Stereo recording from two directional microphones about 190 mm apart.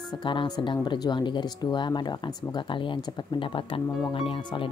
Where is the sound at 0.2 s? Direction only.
25° left (ahead or behind).